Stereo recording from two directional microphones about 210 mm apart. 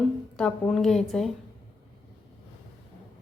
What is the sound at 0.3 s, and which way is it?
Speech, 5° left (ahead or behind).